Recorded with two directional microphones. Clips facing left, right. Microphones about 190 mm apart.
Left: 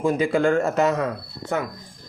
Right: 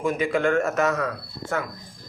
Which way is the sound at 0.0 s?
35° left (ahead or behind).